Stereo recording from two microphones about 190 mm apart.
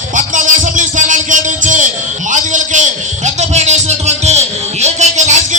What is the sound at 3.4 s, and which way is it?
Music, 35° right (ahead or behind).